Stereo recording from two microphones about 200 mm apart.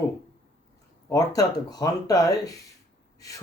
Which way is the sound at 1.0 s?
20° left (ahead or behind).